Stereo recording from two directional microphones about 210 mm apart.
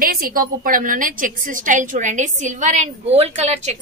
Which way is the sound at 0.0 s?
45° right (ahead or behind).